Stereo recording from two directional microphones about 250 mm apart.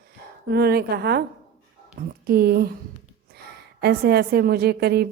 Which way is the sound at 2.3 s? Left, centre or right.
Right.